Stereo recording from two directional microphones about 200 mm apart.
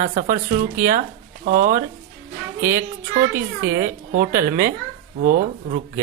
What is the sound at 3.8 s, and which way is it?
Speech, 45° right (ahead or behind).